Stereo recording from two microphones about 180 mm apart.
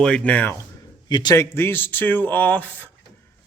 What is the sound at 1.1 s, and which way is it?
Speech, 25° left (ahead or behind).